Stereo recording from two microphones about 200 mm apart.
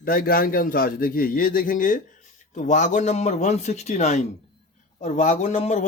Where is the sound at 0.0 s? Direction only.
45° left (ahead or behind).